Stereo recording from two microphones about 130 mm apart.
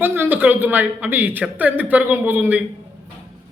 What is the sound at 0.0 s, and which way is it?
A woman's voice, 15° right (ahead or behind).